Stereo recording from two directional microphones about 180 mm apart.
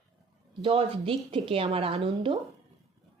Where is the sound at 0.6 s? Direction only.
30° right (ahead or behind).